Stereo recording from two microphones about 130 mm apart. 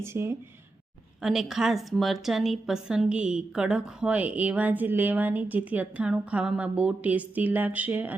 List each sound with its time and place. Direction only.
0.0 s speech: 20° right (ahead or behind)
1.2 s a woman's voice: 5° right (ahead or behind)